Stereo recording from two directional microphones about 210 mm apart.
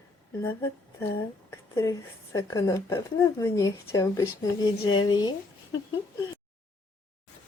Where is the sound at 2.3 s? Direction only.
15° left (ahead or behind).